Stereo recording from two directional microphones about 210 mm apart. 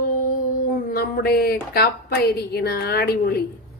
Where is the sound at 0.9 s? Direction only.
45° left (ahead or behind).